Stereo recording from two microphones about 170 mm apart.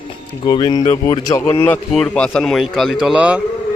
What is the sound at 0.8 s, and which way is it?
Speech, 45° left (ahead or behind).